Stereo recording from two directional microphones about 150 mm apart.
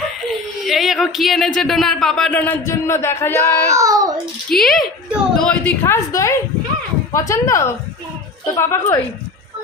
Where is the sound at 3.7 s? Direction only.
20° right (ahead or behind).